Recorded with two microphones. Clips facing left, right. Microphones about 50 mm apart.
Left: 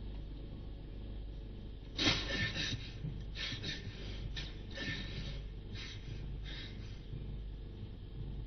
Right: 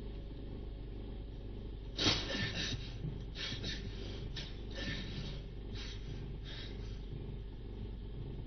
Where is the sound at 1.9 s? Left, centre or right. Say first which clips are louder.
Left 1 dB; left.